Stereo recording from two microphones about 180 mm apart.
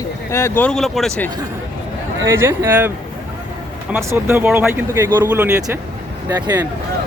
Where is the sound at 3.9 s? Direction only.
15° right (ahead or behind).